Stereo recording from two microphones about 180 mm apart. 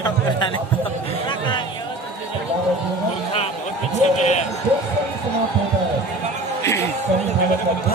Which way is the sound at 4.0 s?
40° left (ahead or behind).